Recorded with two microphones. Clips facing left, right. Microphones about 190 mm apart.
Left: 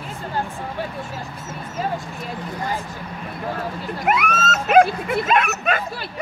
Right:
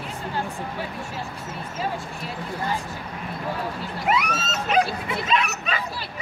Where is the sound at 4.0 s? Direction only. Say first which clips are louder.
Left 3 dB; 50° left (ahead or behind).